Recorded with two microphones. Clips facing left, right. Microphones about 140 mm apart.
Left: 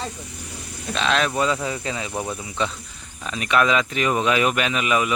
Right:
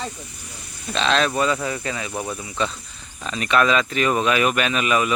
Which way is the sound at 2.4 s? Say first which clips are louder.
Right 2 dB; 20° left (ahead or behind).